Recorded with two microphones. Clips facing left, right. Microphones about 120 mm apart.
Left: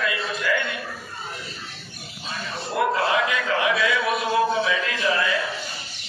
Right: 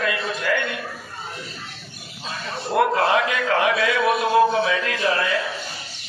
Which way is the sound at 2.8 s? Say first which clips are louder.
Right 3 dB; 55° right (ahead or behind).